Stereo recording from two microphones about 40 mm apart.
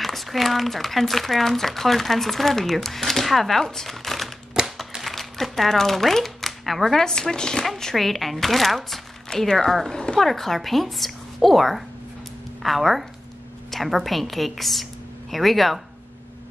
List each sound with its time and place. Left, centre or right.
0.0 s speech: centre
7.6 s speech: centre
9.3 s speech: centre
10.2 s speech: centre